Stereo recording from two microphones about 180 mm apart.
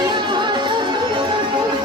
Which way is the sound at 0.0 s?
25° right (ahead or behind).